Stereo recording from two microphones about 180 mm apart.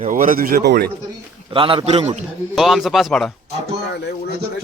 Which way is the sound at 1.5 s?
30° right (ahead or behind).